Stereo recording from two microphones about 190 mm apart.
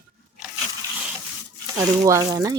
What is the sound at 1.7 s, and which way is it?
Speech, 20° right (ahead or behind).